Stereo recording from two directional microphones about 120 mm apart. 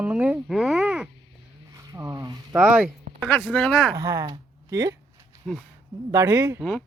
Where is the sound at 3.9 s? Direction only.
30° right (ahead or behind).